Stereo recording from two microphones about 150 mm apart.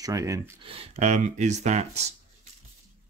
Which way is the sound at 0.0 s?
20° right (ahead or behind).